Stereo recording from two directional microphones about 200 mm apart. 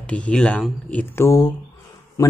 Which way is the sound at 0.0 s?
5° left (ahead or behind).